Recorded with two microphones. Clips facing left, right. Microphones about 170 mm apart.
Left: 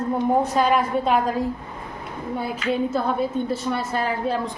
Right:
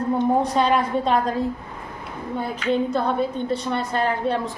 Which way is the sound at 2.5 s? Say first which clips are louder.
Right 2 dB; 5° left (ahead or behind).